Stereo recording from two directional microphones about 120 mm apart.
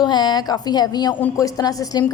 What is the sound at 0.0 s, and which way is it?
A woman's voice, 35° left (ahead or behind).